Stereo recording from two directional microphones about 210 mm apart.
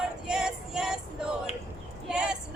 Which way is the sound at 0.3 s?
5° right (ahead or behind).